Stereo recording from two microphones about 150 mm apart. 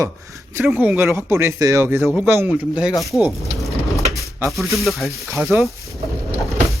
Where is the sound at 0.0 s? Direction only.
20° right (ahead or behind).